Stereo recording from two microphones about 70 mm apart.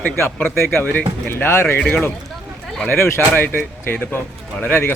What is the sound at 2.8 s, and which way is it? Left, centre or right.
Speech, left.